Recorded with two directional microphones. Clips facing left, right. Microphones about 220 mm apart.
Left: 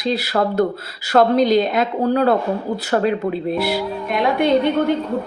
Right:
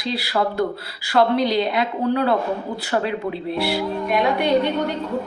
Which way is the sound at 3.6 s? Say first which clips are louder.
Left 1 dB; 45° left (ahead or behind).